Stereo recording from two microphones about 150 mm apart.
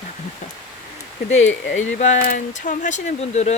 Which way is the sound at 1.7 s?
55° left (ahead or behind).